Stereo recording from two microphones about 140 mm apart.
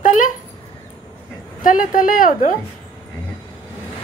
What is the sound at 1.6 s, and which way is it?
Speech, 80° left.